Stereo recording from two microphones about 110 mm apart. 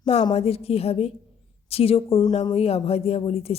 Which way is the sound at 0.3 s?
65° left (ahead or behind).